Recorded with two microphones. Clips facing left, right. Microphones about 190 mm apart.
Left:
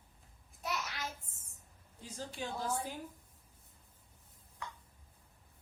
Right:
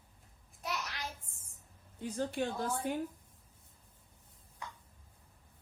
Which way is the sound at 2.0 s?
60° right (ahead or behind).